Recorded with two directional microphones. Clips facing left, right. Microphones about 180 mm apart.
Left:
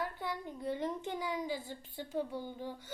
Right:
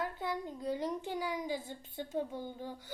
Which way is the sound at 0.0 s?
20° right (ahead or behind).